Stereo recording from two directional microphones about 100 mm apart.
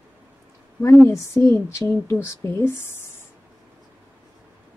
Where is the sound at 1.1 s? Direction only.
30° left (ahead or behind).